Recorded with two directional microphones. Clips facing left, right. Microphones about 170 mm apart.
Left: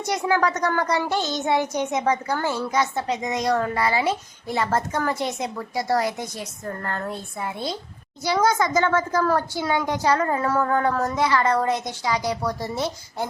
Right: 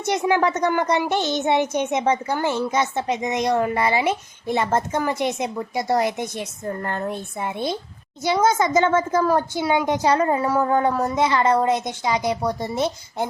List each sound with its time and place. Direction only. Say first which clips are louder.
0.0 s a child's voice: right 2 dB; 20° right (ahead or behind)